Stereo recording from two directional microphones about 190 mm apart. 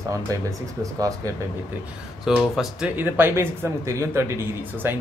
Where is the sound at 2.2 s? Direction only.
Centre (ahead or behind).